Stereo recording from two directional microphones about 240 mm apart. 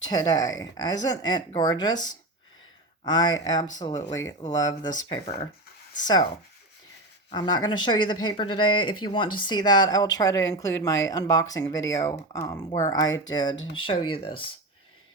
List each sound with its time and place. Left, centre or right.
0.1 s speech: centre
7.3 s speech: centre